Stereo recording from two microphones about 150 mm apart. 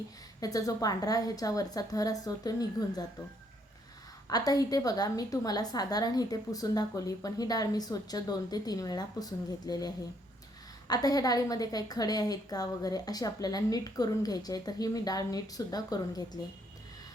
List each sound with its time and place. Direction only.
0.3 s a woman's voice: 25° left (ahead or behind)
4.3 s a woman's voice: 25° left (ahead or behind)